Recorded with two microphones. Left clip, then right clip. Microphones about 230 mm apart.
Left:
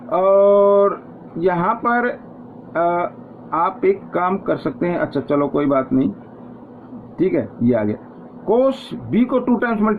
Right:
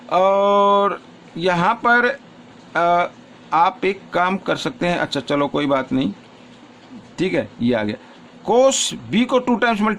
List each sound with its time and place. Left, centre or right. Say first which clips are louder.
0.1 s a sound: left 2 dB; right
1.5 s speech: right 2 dB; right
7.2 s speech: left 2 dB; right